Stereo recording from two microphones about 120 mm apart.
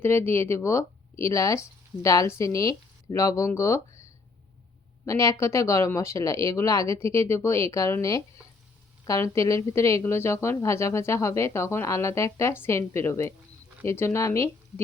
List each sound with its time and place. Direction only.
0.0 s speech: 20° left (ahead or behind)
5.0 s a woman's voice: 25° left (ahead or behind)